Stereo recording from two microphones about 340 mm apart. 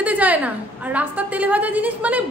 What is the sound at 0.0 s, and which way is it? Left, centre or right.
A woman's voice, centre.